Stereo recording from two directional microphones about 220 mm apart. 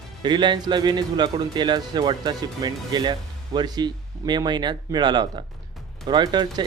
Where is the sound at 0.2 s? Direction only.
20° right (ahead or behind).